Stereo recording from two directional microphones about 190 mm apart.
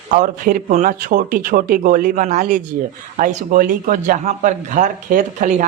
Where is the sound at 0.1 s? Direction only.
45° right (ahead or behind).